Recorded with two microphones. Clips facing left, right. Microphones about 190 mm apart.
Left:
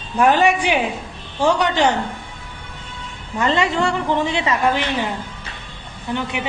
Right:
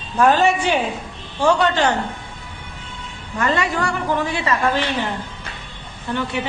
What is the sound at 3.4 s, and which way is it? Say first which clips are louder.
A woman's voice: left 2 dB; 20° left (ahead or behind).